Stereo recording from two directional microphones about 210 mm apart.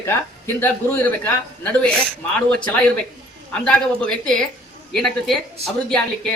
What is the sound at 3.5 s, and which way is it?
A man's voice, 5° left (ahead or behind).